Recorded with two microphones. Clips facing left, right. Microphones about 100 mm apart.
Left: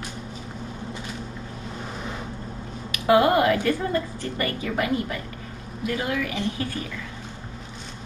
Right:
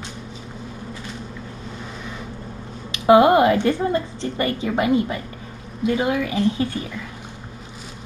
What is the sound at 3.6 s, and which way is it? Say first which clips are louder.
Speech: right 4 dB; 25° right (ahead or behind).